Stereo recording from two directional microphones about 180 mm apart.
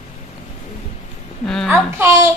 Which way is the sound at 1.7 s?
10° right (ahead or behind).